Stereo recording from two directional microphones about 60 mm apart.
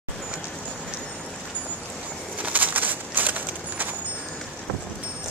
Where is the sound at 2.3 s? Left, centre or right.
Right.